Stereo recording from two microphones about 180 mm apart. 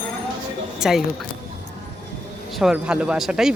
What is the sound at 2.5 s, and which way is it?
Speech, 5° right (ahead or behind).